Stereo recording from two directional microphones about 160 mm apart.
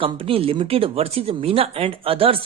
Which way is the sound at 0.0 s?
35° right (ahead or behind).